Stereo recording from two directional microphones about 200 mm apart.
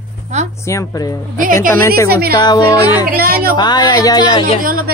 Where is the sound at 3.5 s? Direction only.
20° left (ahead or behind).